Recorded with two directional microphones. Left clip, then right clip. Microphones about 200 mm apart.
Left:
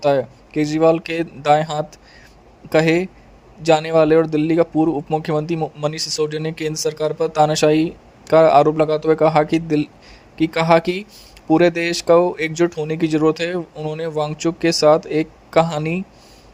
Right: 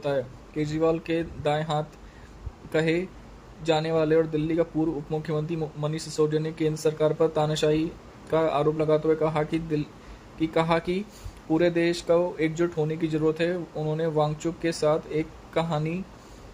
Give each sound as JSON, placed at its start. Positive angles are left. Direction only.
{"t": 0.0, "sound": "speech", "side_deg": 50}